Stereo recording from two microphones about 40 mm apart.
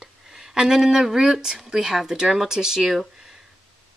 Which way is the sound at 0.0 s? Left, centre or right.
Centre.